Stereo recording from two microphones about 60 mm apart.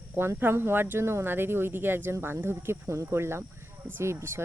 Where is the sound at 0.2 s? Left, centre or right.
Right.